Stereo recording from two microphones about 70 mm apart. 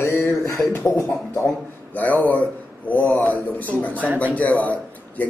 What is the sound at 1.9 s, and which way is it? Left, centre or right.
A man's voice, left.